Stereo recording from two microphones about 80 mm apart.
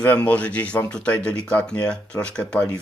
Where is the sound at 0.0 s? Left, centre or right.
Centre.